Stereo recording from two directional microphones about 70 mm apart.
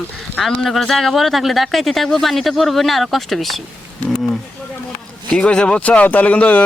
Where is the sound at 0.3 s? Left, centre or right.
Centre.